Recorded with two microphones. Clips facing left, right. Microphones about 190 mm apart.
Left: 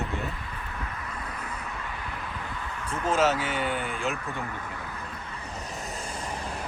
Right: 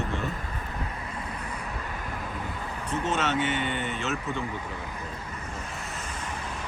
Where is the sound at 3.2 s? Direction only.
5° left (ahead or behind).